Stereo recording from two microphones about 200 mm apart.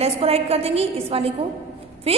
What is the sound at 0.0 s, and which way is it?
A woman's voice, 30° right (ahead or behind).